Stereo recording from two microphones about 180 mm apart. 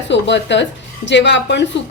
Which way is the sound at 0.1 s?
80° left.